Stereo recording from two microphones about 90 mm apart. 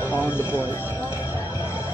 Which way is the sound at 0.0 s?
25° left (ahead or behind).